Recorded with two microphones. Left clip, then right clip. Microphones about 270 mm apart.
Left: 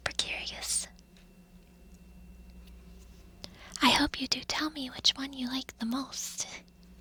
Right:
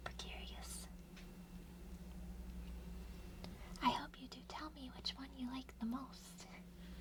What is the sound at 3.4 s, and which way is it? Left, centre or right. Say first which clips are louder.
Whispering: left 12 dB; left.